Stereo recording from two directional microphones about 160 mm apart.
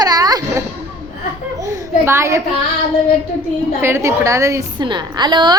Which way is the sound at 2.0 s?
15° right (ahead or behind).